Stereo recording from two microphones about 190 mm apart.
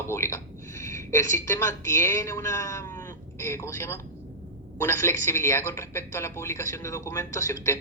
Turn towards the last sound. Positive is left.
turn(degrees=15)  # may be behind; listen again after turning